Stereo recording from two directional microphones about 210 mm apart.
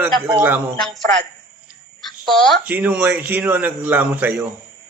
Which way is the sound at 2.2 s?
Centre (ahead or behind).